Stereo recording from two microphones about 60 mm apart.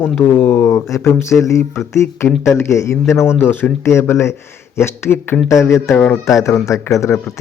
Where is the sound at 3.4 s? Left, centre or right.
Left.